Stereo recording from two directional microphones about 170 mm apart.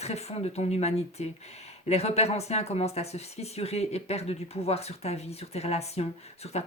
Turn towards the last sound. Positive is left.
turn(degrees=40)  # may be behind; listen again after turning